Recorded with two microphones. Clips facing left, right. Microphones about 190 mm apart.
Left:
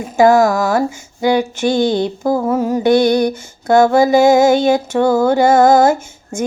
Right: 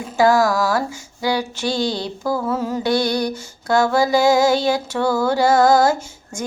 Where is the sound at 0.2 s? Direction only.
20° left (ahead or behind).